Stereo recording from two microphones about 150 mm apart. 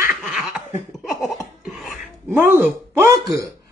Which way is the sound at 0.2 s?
5° right (ahead or behind).